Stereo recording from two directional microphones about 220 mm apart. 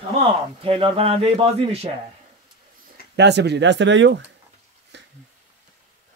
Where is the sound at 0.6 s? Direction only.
25° right (ahead or behind).